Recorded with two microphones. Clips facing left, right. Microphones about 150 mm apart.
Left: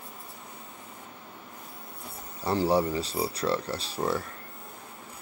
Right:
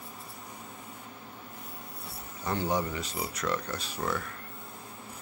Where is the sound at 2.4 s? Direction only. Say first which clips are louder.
Left 5 dB; 35° left (ahead or behind).